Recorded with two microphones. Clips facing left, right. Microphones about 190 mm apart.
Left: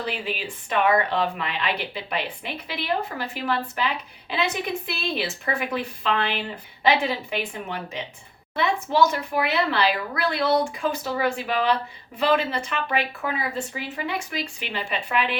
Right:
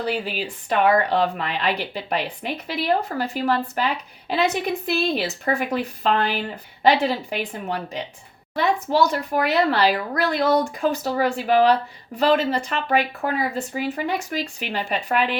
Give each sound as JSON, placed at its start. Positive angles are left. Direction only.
{"t": 0.0, "sound": "speech", "side_deg": -40}
{"t": 4.9, "sound": "a woman's voice", "side_deg": -40}